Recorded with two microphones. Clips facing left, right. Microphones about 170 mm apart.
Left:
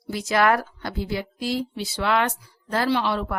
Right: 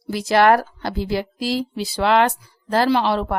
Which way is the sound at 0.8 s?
85° right.